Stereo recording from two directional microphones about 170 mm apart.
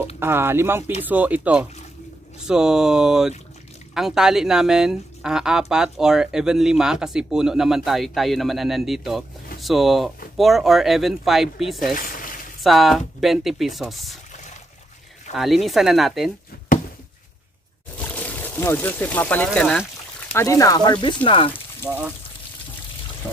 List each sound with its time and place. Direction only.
0.2 s speech: 15° right (ahead or behind)
11.9 s a sound: 55° left (ahead or behind)
12.6 s speech: centre (ahead or behind)
15.3 s speech: centre (ahead or behind)
17.9 s speech: 10° left (ahead or behind)
20.3 s speech: 20° left (ahead or behind)
21.8 s speech: 10° right (ahead or behind)